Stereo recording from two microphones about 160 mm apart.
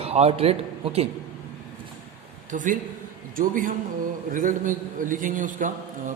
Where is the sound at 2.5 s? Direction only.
55° right (ahead or behind).